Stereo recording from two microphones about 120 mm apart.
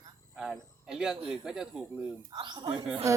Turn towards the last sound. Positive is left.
turn(degrees=-25)  # may be behind; listen again after turning